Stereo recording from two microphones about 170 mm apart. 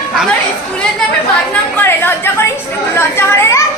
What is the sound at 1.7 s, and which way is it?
A woman's voice, 10° left (ahead or behind).